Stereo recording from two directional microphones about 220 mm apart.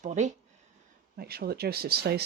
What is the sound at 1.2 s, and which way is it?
Speech, 45° right (ahead or behind).